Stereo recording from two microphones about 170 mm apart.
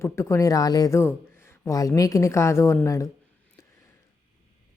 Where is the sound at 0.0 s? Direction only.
15° left (ahead or behind).